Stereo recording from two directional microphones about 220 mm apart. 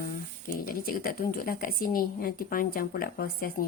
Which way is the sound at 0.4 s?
40° left (ahead or behind).